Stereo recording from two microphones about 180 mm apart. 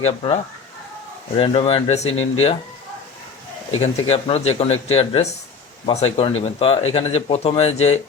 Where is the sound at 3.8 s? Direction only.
35° left (ahead or behind).